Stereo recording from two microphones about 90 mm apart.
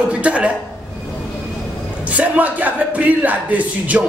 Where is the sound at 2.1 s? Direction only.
15° right (ahead or behind).